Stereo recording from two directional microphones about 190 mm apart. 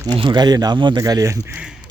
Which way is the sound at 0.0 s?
25° right (ahead or behind).